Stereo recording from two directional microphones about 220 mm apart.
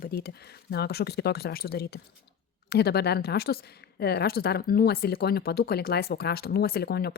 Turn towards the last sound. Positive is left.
turn(degrees=45)  # may be behind; listen again after turning